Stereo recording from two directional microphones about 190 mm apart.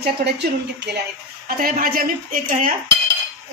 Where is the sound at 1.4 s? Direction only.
50° right (ahead or behind).